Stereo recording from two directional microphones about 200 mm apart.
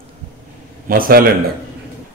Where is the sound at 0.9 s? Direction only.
45° right (ahead or behind).